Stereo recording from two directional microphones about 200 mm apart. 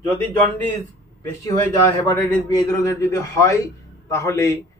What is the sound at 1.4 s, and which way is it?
A man's voice, 20° left (ahead or behind).